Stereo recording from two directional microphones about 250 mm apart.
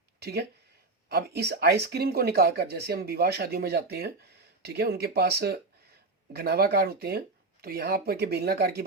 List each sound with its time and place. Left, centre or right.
0.2 s speech: right